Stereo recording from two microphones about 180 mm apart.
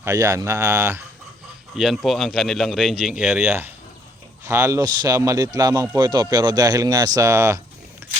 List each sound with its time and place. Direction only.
0.0 s speech: 15° right (ahead or behind)
1.7 s speech: centre (ahead or behind)